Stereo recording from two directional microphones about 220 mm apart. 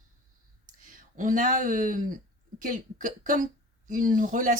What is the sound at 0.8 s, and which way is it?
Speech, 40° right (ahead or behind).